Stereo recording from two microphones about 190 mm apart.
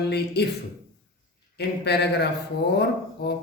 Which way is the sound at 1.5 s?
60° left (ahead or behind).